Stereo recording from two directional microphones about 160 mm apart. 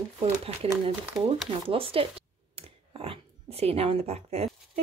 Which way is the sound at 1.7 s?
35° right (ahead or behind).